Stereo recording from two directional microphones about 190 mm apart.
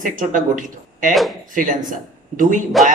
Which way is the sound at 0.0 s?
45° right (ahead or behind).